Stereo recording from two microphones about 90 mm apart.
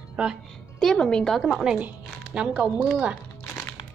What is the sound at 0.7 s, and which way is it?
Speech, 5° left (ahead or behind).